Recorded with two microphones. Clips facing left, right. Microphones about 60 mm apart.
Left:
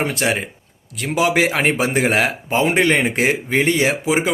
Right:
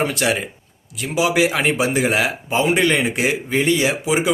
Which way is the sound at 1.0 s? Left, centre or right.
Left.